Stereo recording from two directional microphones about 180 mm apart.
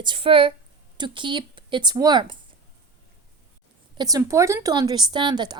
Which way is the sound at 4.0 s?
20° right (ahead or behind).